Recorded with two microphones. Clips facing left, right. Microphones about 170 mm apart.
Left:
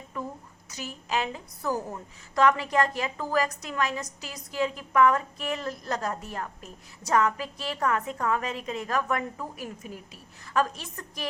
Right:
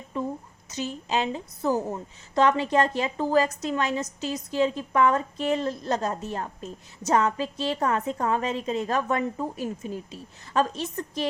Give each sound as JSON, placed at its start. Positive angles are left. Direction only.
{"t": 0.1, "sound": "a woman's voice", "side_deg": -25}